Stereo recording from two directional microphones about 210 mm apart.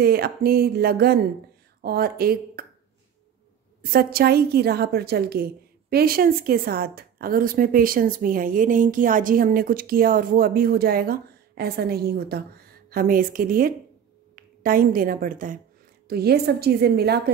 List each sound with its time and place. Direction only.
0.0 s a woman's voice: 50° right (ahead or behind)
3.9 s a woman's voice: 45° right (ahead or behind)